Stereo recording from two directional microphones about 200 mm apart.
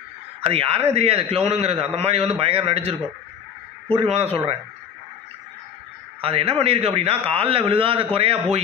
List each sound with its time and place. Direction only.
0.4 s a man's voice: 30° right (ahead or behind)
6.2 s a man's voice: 30° right (ahead or behind)